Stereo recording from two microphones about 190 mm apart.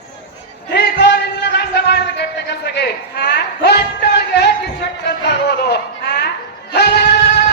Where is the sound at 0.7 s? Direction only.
65° left (ahead or behind).